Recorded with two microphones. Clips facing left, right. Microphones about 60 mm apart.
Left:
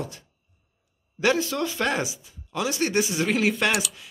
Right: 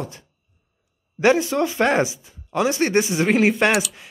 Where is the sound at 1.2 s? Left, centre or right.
Right.